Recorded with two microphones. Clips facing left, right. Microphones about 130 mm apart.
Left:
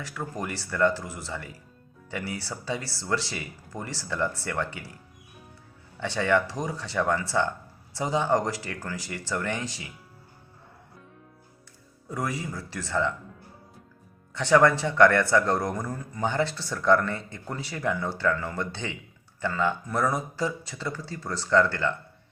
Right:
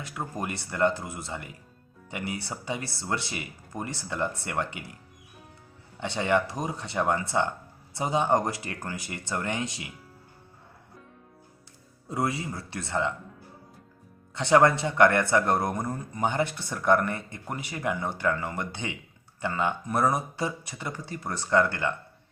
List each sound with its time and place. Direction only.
0.0 s speech: 20° right (ahead or behind)
6.0 s speech: 20° right (ahead or behind)
12.0 s speech: 25° right (ahead or behind)
14.3 s speech: 20° right (ahead or behind)